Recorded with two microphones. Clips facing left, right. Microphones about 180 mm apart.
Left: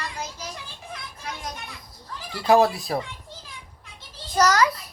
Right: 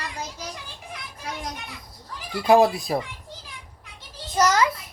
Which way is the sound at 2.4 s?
15° right (ahead or behind).